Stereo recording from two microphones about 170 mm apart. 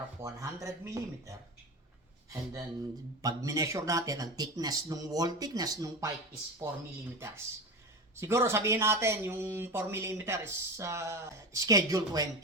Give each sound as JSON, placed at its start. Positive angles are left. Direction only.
{"t": 0.2, "sound": "speech", "side_deg": -20}